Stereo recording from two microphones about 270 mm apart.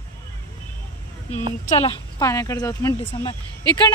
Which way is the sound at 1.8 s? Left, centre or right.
Centre.